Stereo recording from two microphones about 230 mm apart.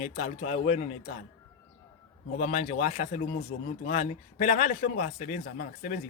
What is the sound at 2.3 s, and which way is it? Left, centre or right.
A man's voice, left.